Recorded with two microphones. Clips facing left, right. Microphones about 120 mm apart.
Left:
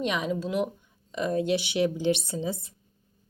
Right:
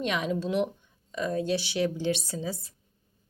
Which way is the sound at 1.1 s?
15° left (ahead or behind).